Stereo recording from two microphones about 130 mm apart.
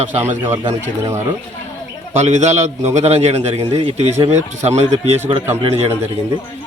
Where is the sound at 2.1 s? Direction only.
60° right (ahead or behind).